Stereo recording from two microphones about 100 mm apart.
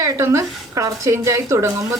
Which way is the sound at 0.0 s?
30° right (ahead or behind).